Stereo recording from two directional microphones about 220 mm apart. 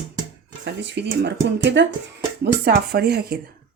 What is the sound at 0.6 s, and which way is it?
Speech, 50° right (ahead or behind).